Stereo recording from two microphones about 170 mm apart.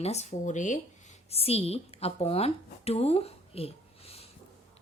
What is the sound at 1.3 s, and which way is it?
Speech, 35° left (ahead or behind).